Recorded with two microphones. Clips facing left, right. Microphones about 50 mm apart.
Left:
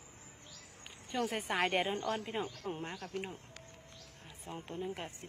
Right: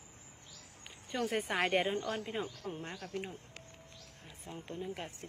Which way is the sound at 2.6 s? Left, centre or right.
Left.